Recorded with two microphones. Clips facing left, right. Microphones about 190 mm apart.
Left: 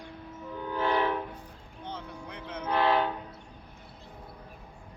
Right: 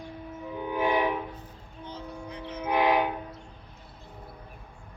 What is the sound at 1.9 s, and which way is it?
Vehicle, 60° left (ahead or behind).